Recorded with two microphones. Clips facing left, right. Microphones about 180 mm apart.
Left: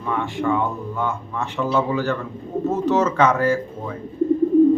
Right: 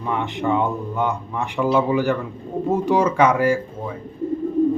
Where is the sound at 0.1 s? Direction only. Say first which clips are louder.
Even; 20° right (ahead or behind).